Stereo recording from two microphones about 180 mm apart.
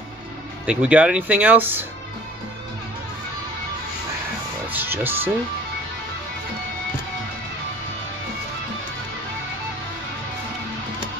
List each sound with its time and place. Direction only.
0.7 s speech: 5° right (ahead or behind)
4.6 s speech: 10° right (ahead or behind)